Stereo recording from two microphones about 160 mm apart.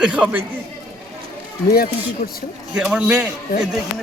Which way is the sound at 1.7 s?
70° left (ahead or behind).